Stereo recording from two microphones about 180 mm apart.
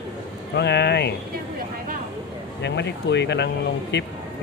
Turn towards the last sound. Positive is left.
turn(degrees=80)